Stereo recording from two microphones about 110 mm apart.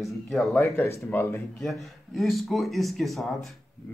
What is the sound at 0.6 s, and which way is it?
Speech, 25° left (ahead or behind).